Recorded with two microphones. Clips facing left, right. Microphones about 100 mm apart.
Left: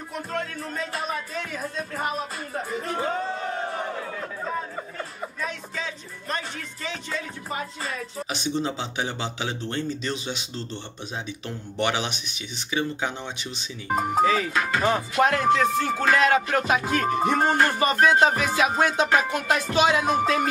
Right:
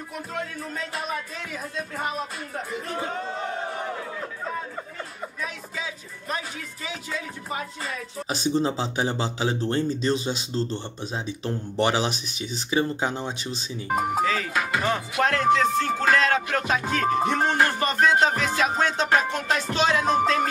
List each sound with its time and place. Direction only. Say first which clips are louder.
0.1 s speech: left 3 dB; 5° right (ahead or behind)
4.5 s music: left 2 dB; centre (ahead or behind)
8.3 s speech: right 4 dB; 40° right (ahead or behind)
13.8 s speech: left 1 dB; 5° right (ahead or behind)
14.2 s music: left 4 dB; 15° left (ahead or behind)
14.5 s music: left 1 dB; 5° right (ahead or behind)
15.2 s music: right 1 dB; 10° left (ahead or behind)
16.5 s speech: left 2 dB; 10° left (ahead or behind)
17.6 s music: left 1 dB; 5° left (ahead or behind)